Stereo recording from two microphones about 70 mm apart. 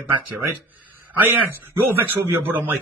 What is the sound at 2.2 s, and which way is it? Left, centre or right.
Speech, right.